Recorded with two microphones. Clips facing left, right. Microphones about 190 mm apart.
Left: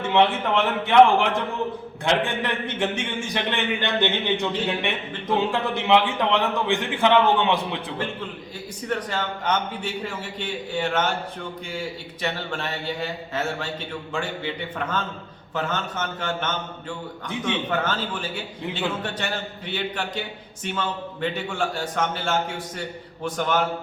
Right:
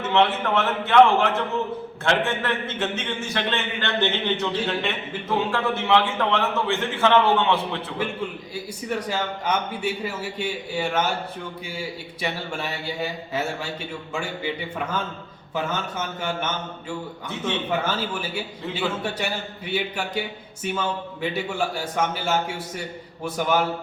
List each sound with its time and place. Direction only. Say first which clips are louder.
0.1 s a man's voice: left 1 dB; 15° left (ahead or behind)
8.5 s a man's voice: left 1 dB; 10° right (ahead or behind)
17.2 s a man's voice: left 1 dB; 15° left (ahead or behind)
17.7 s a man's voice: even; 10° right (ahead or behind)